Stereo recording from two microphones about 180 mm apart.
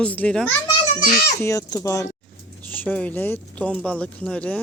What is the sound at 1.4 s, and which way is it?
Speech, 15° left (ahead or behind).